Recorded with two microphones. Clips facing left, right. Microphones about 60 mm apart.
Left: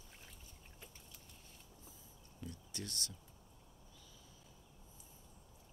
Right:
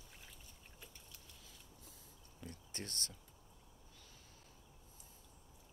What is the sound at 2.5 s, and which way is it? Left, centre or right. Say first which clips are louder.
Speech: right 1 dB; right.